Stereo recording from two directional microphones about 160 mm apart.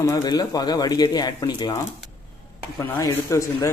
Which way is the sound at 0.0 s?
25° left (ahead or behind).